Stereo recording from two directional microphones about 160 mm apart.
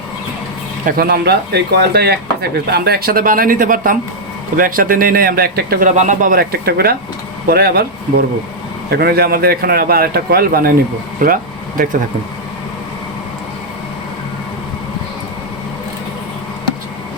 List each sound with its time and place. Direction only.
0.9 s a man's voice: 75° right (ahead or behind)
5.9 s a man's voice: 50° right (ahead or behind); by 7.9 s 75° right (ahead or behind)
8.9 s a man's voice: 80° right
11.2 s speech: 60° right (ahead or behind)